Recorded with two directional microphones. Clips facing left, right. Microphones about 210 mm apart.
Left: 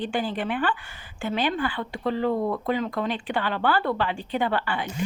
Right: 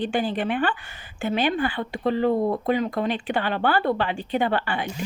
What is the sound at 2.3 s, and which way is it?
Speech, 30° right (ahead or behind).